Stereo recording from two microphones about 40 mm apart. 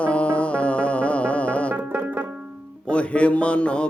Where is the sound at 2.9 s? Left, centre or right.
Left.